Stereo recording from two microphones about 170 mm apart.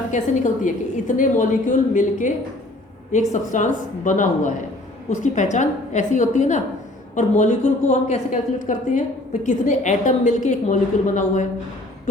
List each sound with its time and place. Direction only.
0.1 s a woman's voice: 45° left (ahead or behind)
3.3 s a woman's voice: 45° left (ahead or behind)